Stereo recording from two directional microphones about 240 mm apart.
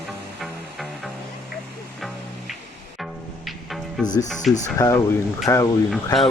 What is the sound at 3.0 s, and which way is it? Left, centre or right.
Music, centre.